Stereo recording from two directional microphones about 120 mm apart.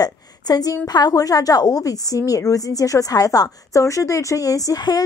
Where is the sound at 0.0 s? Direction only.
35° left (ahead or behind).